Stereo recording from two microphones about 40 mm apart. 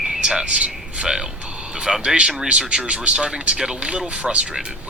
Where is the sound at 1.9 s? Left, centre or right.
Centre.